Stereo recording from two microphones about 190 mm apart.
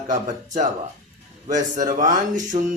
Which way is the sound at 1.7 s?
40° right (ahead or behind).